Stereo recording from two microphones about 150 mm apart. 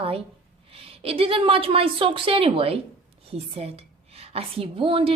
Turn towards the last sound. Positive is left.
turn(degrees=-35)  # may be behind; listen again after turning